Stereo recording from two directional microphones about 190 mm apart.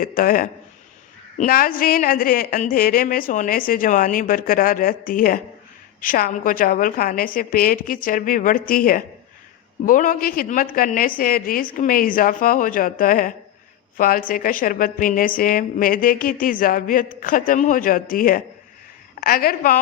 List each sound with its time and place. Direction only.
0.0 s a woman's voice: 50° left (ahead or behind)